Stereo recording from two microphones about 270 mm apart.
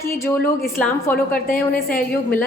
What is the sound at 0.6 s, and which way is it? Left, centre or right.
Speech, centre.